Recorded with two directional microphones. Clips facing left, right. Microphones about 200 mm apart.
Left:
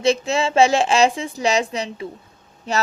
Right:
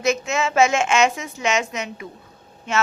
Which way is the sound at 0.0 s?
30° left (ahead or behind).